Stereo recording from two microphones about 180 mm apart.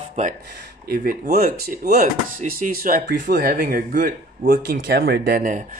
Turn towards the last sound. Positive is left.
turn(degrees=-50)  # may be behind; listen again after turning